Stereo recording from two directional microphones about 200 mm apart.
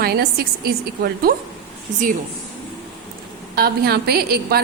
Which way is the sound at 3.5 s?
50° right (ahead or behind).